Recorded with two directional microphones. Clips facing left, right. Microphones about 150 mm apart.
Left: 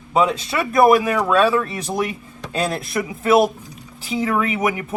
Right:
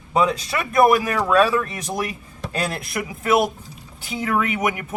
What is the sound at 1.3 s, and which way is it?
Speech, 30° left (ahead or behind).